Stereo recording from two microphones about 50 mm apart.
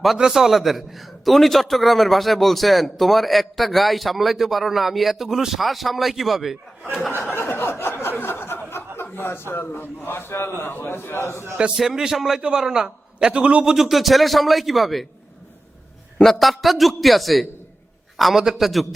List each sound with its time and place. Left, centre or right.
0.2 s a man's voice: centre
7.2 s a sound: left
9.1 s a man's voice: left
11.2 s a man's voice: left
11.8 s a man's voice: centre
12.4 s a man's voice: centre
13.7 s a man's voice: centre
16.2 s a man's voice: centre